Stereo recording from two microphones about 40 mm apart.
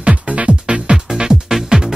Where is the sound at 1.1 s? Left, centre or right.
Centre.